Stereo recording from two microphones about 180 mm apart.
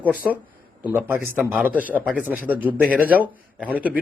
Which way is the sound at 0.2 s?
5° right (ahead or behind).